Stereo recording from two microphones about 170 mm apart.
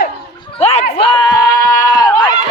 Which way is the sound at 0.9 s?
30° left (ahead or behind).